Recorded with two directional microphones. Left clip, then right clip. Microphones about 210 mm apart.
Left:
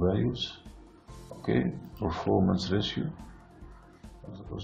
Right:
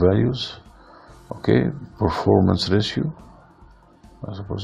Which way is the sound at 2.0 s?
40° right (ahead or behind).